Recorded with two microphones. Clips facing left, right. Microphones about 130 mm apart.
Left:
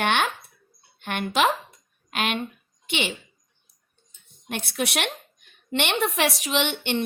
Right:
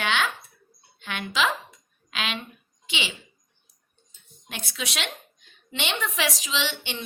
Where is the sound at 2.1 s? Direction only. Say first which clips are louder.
Left 5 dB; 55° left (ahead or behind).